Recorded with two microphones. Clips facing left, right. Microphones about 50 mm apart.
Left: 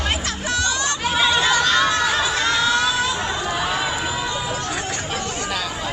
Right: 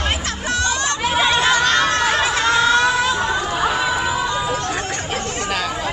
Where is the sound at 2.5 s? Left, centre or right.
Right.